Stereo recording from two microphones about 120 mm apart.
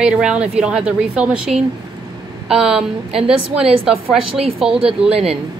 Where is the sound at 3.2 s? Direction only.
5° right (ahead or behind).